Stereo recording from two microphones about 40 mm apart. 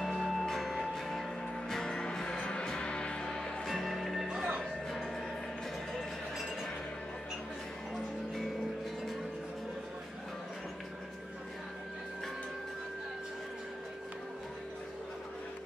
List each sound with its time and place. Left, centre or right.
0.0 s music: centre
3.6 s music: centre